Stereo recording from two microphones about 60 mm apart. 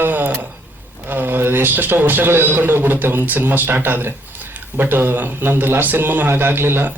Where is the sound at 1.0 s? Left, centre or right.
Right.